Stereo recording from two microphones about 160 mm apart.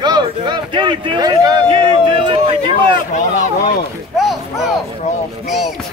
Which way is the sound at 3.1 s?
50° left (ahead or behind).